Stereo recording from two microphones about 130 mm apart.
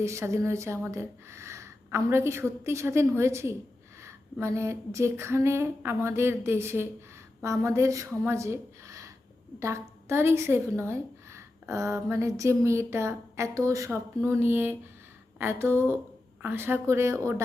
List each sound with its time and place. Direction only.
0.0 s a woman's voice: 20° right (ahead or behind)